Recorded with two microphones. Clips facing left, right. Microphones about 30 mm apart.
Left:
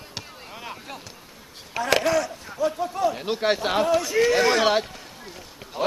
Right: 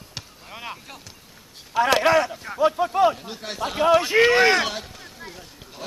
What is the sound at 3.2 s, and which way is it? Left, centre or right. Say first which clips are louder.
Speech: left 7 dB; left.